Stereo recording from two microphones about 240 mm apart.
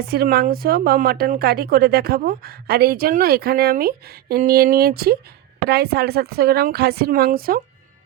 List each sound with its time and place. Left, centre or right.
0.0 s a woman's voice: right